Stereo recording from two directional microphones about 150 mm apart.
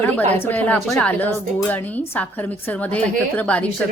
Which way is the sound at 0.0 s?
10° left (ahead or behind).